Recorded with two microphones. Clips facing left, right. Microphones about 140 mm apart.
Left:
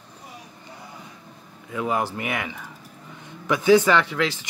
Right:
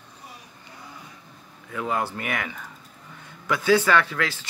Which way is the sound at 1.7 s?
15° left (ahead or behind).